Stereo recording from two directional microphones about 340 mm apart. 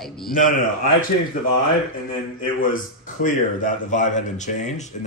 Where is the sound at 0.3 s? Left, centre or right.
Left.